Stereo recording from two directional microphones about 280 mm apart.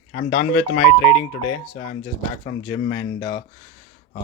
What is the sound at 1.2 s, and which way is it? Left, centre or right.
Speech, left.